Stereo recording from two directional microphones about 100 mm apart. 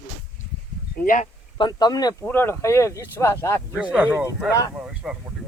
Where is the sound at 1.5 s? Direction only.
50° left (ahead or behind).